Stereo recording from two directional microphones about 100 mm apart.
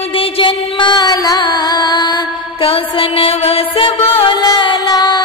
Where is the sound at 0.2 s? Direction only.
55° left (ahead or behind).